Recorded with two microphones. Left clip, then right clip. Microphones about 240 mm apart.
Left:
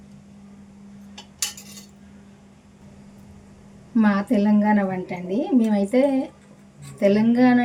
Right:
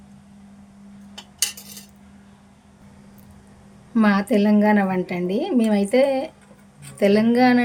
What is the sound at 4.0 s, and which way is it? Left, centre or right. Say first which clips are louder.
A woman's voice: right 2 dB; right.